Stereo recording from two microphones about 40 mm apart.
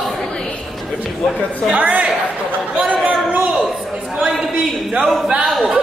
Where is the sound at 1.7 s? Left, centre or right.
Right.